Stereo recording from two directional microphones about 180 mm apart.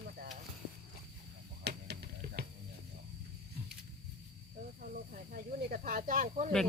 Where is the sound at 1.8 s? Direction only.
65° right (ahead or behind).